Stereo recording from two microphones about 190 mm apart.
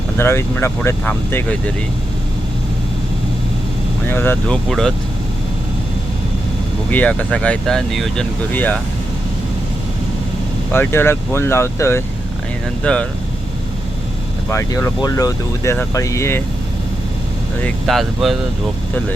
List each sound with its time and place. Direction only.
0.2 s speech: 15° left (ahead or behind)
4.0 s speech: 10° left (ahead or behind)
6.9 s speech: 10° left (ahead or behind)
10.7 s speech: 10° left (ahead or behind)
14.5 s speech: 15° left (ahead or behind)
17.6 s speech: centre (ahead or behind)